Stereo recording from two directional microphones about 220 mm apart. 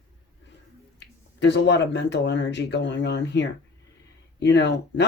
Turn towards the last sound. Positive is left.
turn(degrees=50)  # may be behind; listen again after turning